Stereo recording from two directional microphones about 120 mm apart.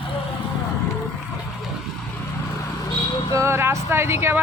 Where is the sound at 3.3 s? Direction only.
25° right (ahead or behind).